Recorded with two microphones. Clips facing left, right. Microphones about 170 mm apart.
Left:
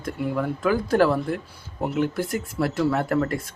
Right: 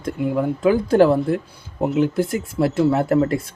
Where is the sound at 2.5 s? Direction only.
25° right (ahead or behind).